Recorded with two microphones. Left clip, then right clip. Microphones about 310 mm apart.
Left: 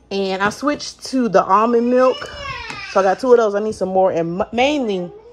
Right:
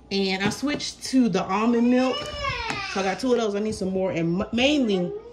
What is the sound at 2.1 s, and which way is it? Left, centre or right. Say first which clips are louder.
Crying: left 1 dB; centre.